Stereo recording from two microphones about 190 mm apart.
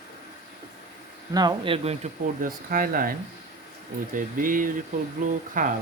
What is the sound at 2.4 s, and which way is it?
Speech, 50° right (ahead or behind).